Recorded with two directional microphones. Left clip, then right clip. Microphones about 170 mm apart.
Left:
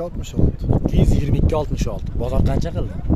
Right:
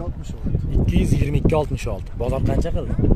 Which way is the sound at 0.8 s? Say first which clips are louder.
Right 1 dB; 15° right (ahead or behind).